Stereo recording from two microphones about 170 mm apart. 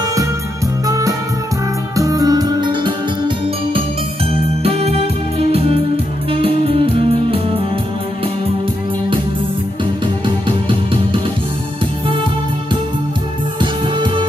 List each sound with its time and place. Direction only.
0.8 s music: 20° right (ahead or behind)
4.6 s music: 35° right (ahead or behind)
10.2 s music: 30° right (ahead or behind)
13.6 s music: 30° right (ahead or behind)